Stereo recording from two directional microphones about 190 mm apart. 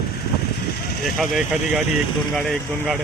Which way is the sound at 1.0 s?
Centre (ahead or behind).